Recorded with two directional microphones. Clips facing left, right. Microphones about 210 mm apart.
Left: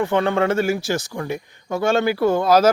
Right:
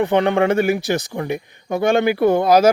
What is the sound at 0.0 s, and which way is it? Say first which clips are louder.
Speech: right 3 dB; 20° right (ahead or behind).